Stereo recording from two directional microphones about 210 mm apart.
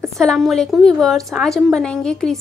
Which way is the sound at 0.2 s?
Centre (ahead or behind).